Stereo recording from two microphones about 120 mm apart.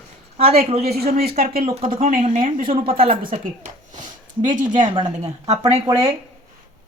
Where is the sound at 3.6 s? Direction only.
90° right.